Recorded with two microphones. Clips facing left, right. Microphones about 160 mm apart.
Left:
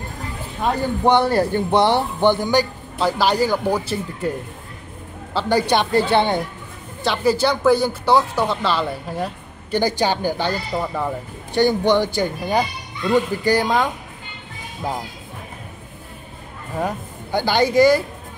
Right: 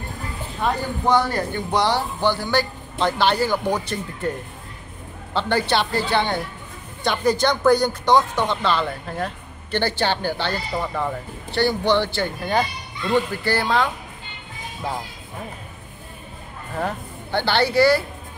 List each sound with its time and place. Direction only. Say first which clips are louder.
1.0 s speech: left 4 dB; 30° left (ahead or behind)
3.0 s speech: left 2 dB; 5° left (ahead or behind)
5.3 s speech: left 3 dB; 10° left (ahead or behind)
7.0 s speech: left 2 dB; 5° left (ahead or behind)
16.7 s speech: left 2 dB; 10° left (ahead or behind)